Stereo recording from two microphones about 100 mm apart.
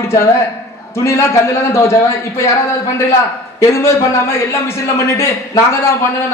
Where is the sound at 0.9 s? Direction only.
25° left (ahead or behind).